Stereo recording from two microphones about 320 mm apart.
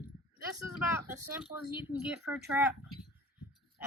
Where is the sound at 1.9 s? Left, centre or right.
Centre.